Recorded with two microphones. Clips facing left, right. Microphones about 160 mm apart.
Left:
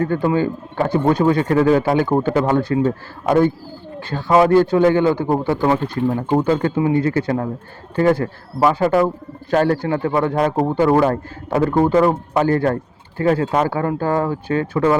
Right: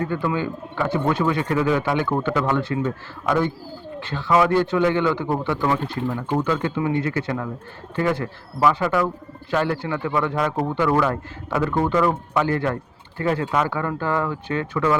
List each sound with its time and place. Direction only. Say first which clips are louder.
0.3 s a man's voice: left 6 dB; 40° left (ahead or behind)
9.5 s a man's voice: left 6 dB; 50° left (ahead or behind); by 14.9 s 30° left (ahead or behind)